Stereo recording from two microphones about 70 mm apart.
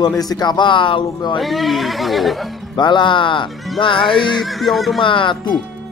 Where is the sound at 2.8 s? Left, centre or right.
Left.